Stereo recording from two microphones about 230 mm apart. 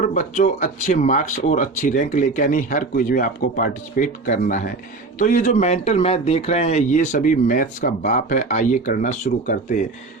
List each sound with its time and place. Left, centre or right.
0.0 s speech: left